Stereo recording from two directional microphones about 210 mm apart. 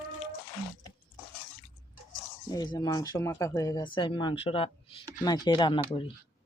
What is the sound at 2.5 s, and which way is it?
Speech, 20° left (ahead or behind).